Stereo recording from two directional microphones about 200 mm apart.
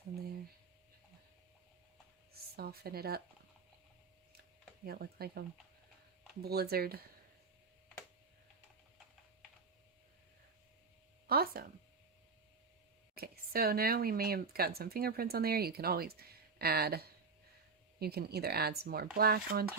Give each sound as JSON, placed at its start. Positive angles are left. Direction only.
{"t": 2.3, "sound": "speech", "side_deg": -50}
{"t": 4.9, "sound": "speech", "side_deg": -50}
{"t": 6.4, "sound": "speech", "side_deg": -50}
{"t": 11.3, "sound": "speech", "side_deg": -50}
{"t": 13.1, "sound": "speech", "side_deg": -50}